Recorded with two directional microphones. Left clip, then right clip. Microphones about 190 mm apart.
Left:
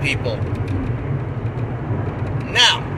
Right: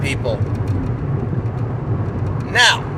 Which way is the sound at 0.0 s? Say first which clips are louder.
Even; 20° right (ahead or behind).